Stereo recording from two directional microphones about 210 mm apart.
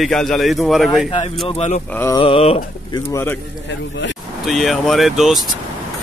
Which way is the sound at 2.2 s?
30° left (ahead or behind).